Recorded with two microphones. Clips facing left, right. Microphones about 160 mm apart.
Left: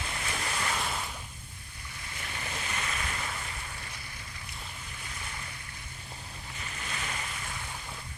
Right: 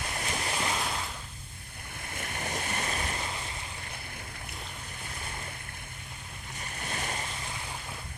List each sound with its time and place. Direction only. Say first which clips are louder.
0.2 s waves: right 2 dB; 25° right (ahead or behind)
0.8 s a sound: right 1 dB; centre (ahead or behind)
2.0 s waves: right 4 dB; 50° right (ahead or behind); by 3.3 s 30° right (ahead or behind)
6.6 s boat: right 3 dB; 45° right (ahead or behind)